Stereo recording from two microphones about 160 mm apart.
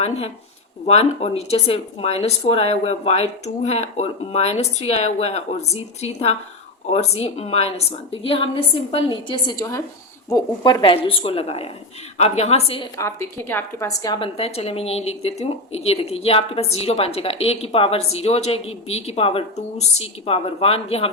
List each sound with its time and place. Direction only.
0.9 s a woman's voice: 40° left (ahead or behind)
13.0 s a woman's voice: 15° left (ahead or behind); by 21.1 s 40° left (ahead or behind)